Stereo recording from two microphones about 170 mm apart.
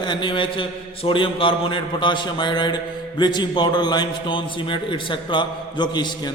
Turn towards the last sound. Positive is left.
turn(degrees=25)  # may be behind; listen again after turning